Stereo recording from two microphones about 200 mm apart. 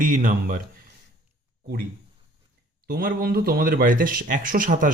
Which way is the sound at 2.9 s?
50° right (ahead or behind).